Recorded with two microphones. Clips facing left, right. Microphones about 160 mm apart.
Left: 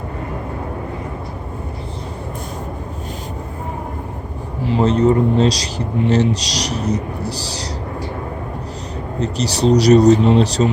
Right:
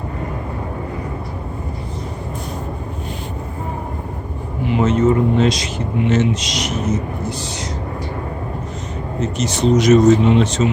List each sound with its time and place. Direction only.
4.6 s speech: 35° left (ahead or behind)
9.2 s speech: 35° left (ahead or behind)